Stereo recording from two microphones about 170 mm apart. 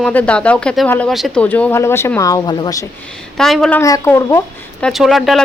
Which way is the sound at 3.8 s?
20° left (ahead or behind).